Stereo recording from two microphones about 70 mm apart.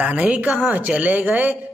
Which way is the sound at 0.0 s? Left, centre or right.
Centre.